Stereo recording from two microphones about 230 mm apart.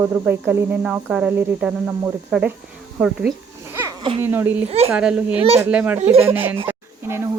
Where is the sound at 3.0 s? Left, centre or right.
Centre.